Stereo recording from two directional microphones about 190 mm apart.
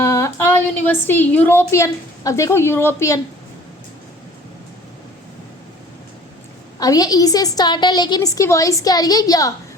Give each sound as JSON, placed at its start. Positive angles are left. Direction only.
{"t": 0.0, "sound": "a woman's voice", "side_deg": 15}
{"t": 6.7, "sound": "a woman's voice", "side_deg": 20}